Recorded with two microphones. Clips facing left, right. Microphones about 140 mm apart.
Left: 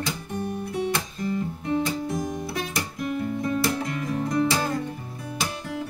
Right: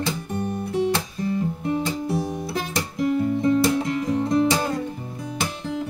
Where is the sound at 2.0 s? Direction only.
30° right (ahead or behind).